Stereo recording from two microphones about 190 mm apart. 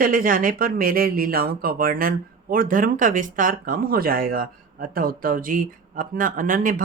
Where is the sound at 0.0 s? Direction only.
45° right (ahead or behind).